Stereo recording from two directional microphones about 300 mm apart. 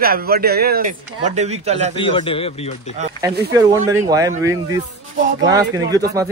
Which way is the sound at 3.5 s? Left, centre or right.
Centre.